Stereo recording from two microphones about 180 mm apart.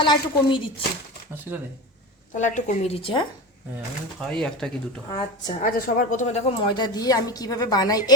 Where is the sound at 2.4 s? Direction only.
45° left (ahead or behind).